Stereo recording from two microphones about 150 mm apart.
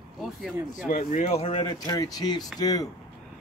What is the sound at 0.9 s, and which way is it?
Speech, 60° left (ahead or behind).